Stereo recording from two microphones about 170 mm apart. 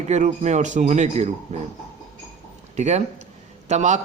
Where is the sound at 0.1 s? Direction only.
40° right (ahead or behind).